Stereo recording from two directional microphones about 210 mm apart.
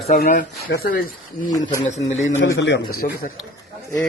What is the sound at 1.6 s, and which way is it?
Speech, 15° left (ahead or behind).